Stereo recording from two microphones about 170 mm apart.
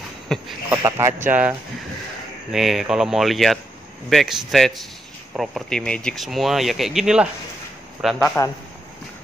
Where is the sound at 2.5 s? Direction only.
Centre (ahead or behind).